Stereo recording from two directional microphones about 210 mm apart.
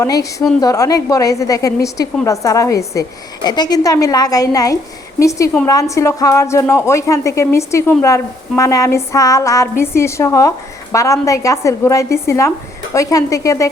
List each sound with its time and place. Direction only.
0.0 s a woman's voice: 15° left (ahead or behind)